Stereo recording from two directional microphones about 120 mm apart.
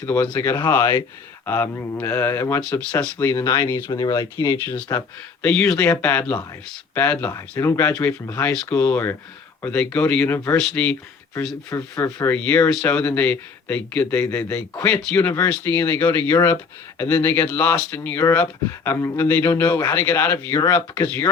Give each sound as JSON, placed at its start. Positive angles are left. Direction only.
{"t": 0.0, "sound": "speech", "side_deg": 15}
{"t": 4.5, "sound": "speech", "side_deg": 15}
{"t": 7.3, "sound": "speech", "side_deg": 25}
{"t": 8.4, "sound": "speech", "side_deg": 10}
{"t": 11.7, "sound": "speech", "side_deg": 20}